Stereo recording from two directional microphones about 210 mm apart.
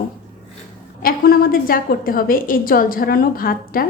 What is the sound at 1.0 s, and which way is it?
A woman's voice, 45° left (ahead or behind).